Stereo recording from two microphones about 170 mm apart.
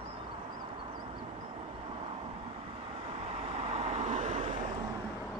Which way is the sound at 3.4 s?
35° right (ahead or behind).